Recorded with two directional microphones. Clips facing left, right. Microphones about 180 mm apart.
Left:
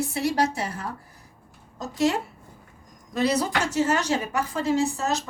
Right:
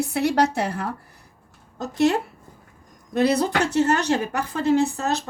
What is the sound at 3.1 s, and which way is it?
A woman's voice, 60° right (ahead or behind).